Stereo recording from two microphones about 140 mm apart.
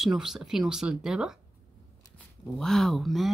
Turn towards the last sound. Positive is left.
turn(degrees=0)  # may be behind; listen again after turning